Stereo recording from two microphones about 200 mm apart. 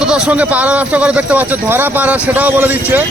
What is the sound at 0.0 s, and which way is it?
Speech, 5° right (ahead or behind).